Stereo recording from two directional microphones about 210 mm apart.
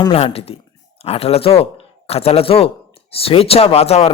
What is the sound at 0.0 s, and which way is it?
A woman's voice, 25° left (ahead or behind).